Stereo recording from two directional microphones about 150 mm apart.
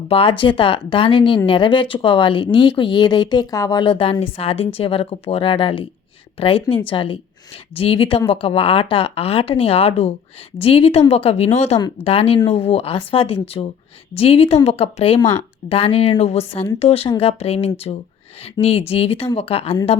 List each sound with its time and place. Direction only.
0.1 s speech: 35° left (ahead or behind)